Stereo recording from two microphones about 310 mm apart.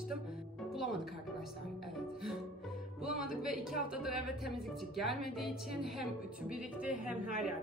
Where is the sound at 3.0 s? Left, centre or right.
Right.